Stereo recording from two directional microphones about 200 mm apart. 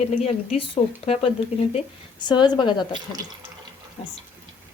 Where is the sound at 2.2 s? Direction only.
20° left (ahead or behind).